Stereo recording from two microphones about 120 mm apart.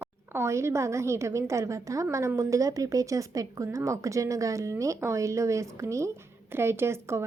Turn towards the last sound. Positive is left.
turn(degrees=-20)  # may be behind; listen again after turning